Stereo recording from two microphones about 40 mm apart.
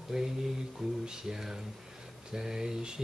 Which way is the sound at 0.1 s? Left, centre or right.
Centre.